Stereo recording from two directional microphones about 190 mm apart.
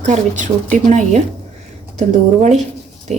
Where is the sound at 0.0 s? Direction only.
40° right (ahead or behind).